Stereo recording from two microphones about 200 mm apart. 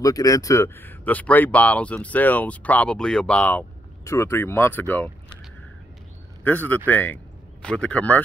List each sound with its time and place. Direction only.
0.0 s speech: 15° left (ahead or behind)
6.4 s speech: 10° left (ahead or behind)